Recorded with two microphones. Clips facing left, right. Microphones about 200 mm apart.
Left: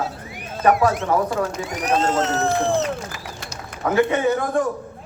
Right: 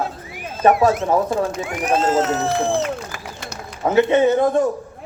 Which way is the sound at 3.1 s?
55° right (ahead or behind).